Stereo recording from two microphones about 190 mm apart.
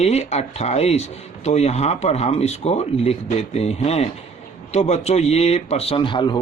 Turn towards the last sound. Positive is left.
turn(degrees=25)  # may be behind; listen again after turning